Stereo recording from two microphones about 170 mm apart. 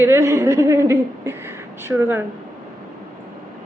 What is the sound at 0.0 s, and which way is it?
A woman's voice, 15° right (ahead or behind).